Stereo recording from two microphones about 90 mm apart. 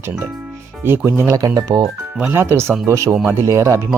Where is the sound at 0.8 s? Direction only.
25° right (ahead or behind); by 1.9 s 45° right (ahead or behind).